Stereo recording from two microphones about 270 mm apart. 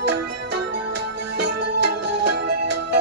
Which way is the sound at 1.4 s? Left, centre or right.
Right.